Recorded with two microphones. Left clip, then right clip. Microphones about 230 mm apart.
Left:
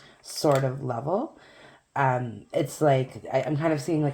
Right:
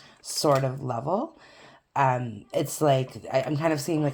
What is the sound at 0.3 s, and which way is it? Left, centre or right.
Speech, right.